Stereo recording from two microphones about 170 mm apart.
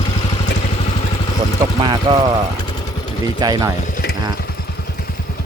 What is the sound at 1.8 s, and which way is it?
Speech, 30° right (ahead or behind).